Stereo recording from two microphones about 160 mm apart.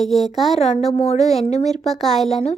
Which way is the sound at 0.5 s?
45° left (ahead or behind).